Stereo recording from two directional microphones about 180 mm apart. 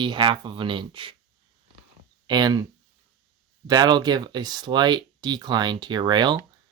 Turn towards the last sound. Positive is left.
turn(degrees=-25)  # may be behind; listen again after turning